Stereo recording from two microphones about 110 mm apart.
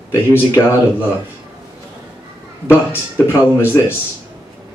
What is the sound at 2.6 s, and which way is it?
Speech, 20° left (ahead or behind).